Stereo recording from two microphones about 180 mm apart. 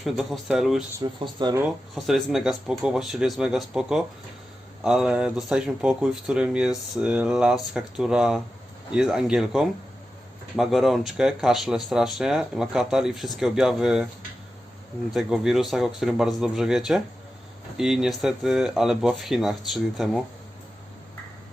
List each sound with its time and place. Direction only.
0.0 s speech: centre (ahead or behind)
0.9 s speech: 25° right (ahead or behind)
2.0 s speech: centre (ahead or behind)
15.1 s speech: centre (ahead or behind)